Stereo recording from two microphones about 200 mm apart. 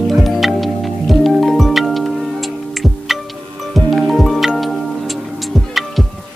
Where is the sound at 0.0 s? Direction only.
Centre (ahead or behind).